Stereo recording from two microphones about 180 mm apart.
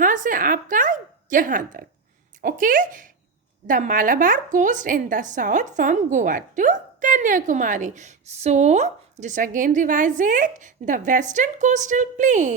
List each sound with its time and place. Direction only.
0.0 s a woman's voice: 45° right (ahead or behind)